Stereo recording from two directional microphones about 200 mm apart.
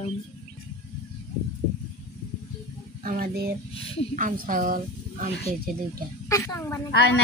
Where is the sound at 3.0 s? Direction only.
45° right (ahead or behind).